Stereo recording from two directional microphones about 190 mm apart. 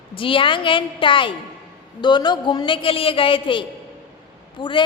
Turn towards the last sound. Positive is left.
turn(degrees=25)  # may be behind; listen again after turning